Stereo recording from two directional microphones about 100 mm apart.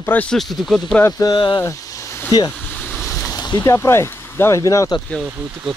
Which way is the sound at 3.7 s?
25° left (ahead or behind).